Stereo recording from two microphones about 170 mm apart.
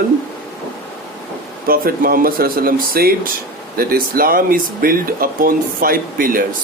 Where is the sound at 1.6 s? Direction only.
60° right (ahead or behind).